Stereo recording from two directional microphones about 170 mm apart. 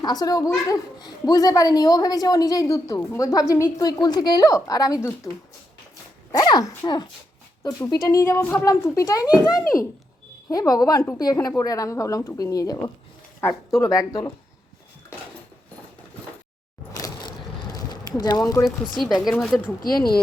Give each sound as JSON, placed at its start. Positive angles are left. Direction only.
{"t": 0.0, "sound": "a woman's voice", "side_deg": 25}
{"t": 6.3, "sound": "a woman's voice", "side_deg": 20}
{"t": 10.5, "sound": "a woman's voice", "side_deg": 20}
{"t": 16.9, "sound": "a sound", "side_deg": 20}
{"t": 18.2, "sound": "a woman's voice", "side_deg": 20}
{"t": 19.4, "sound": "speech", "side_deg": 5}